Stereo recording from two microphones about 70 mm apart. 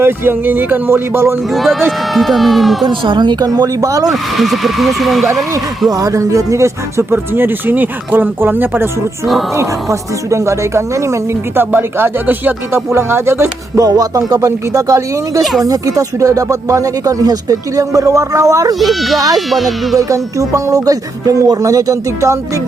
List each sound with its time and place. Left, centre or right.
0.0 s speech: right
1.5 s speech: centre
2.8 s speech: right
4.1 s speech: centre
5.9 s speech: right
7.1 s speech: right
9.6 s speech: right
11.6 s speech: right
12.9 s speech: right
13.8 s speech: right
18.7 s speech: centre
20.0 s speech: right